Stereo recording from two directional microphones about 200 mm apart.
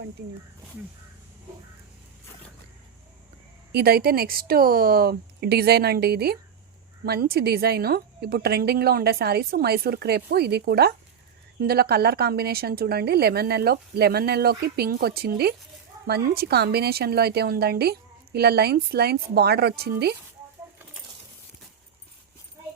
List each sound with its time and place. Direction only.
3.7 s a woman's voice: 50° right (ahead or behind)